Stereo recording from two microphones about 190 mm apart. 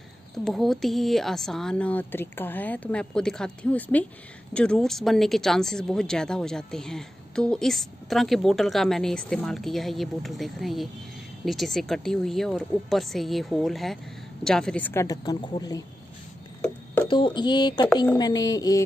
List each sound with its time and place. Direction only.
0.5 s a woman's voice: centre (ahead or behind); by 15.8 s 20° left (ahead or behind)
16.6 s a sound: 10° left (ahead or behind)
17.1 s a woman's voice: 25° left (ahead or behind)